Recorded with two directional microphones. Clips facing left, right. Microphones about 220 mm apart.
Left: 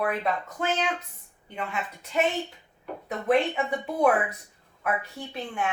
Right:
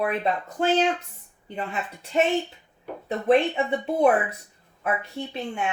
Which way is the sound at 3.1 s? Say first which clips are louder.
Right 3 dB; 25° right (ahead or behind).